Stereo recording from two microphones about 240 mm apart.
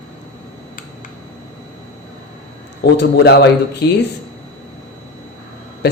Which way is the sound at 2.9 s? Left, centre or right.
Left.